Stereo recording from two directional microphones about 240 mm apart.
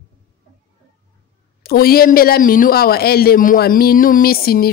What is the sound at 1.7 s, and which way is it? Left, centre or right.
Speech, left.